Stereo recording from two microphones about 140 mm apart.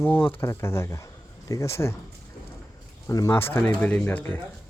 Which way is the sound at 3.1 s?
25° left (ahead or behind).